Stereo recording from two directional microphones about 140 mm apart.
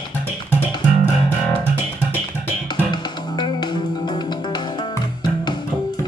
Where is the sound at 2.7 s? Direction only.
30° left (ahead or behind).